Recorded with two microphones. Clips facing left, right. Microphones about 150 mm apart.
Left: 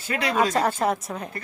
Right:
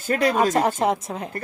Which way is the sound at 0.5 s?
20° right (ahead or behind).